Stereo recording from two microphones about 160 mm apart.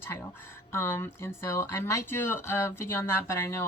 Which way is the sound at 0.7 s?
15° left (ahead or behind).